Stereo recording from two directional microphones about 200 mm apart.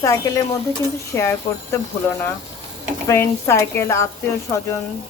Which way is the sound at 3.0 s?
15° left (ahead or behind).